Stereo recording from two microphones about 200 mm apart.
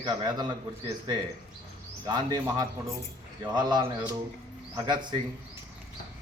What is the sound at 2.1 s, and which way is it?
A man's voice, 20° right (ahead or behind).